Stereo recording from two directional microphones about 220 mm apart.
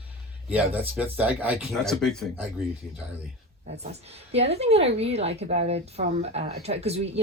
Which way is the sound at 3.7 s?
30° right (ahead or behind).